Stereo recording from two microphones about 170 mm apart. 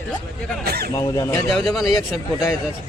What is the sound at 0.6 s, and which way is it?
Speech, 65° right (ahead or behind).